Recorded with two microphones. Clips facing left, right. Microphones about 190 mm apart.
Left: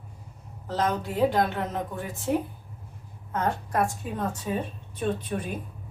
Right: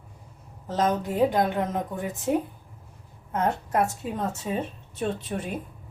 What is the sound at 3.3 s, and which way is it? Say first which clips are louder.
A woman's voice: right 2 dB; 20° right (ahead or behind).